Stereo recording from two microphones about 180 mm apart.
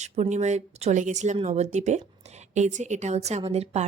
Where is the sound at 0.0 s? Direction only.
40° right (ahead or behind).